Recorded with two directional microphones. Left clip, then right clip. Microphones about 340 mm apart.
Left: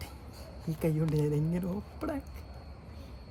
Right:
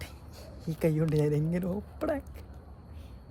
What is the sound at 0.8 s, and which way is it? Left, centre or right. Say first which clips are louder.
Speech: right 4 dB; centre.